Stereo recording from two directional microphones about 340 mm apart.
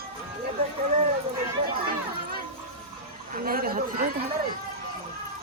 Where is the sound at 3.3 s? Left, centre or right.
Right.